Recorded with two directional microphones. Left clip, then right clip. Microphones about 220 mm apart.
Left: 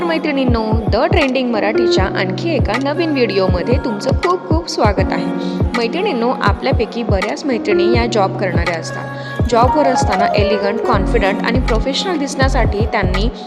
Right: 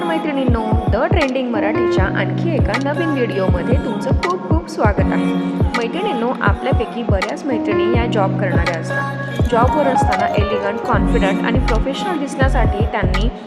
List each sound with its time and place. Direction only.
0.1 s speech: 40° left (ahead or behind)
4.8 s speech: 45° left (ahead or behind)
6.2 s speech: 40° left (ahead or behind)
9.5 s speech: 45° left (ahead or behind)